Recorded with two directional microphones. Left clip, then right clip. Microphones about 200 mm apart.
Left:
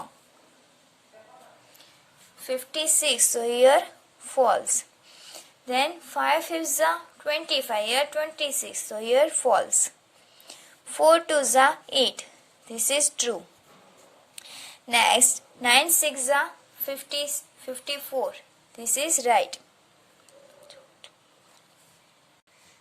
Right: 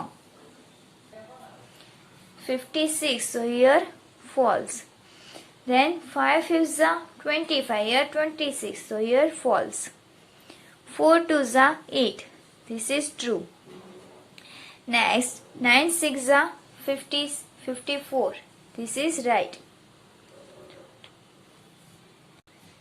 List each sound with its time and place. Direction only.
2.4 s a woman's voice: 30° left (ahead or behind)
10.8 s a woman's voice: 25° left (ahead or behind)